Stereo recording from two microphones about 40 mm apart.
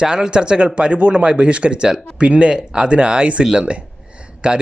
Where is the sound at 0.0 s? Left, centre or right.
Right.